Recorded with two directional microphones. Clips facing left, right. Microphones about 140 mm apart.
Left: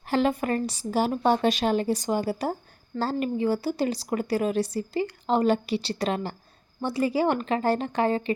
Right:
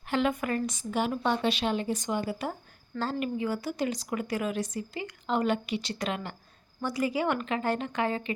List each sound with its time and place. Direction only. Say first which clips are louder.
0.1 s speech: left 4 dB; 35° left (ahead or behind)